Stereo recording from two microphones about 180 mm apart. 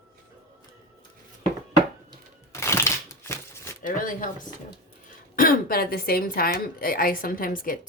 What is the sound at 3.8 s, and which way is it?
A woman's voice, 50° left (ahead or behind).